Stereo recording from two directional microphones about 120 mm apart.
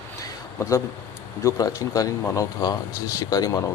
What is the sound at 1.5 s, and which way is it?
Speech, 30° left (ahead or behind).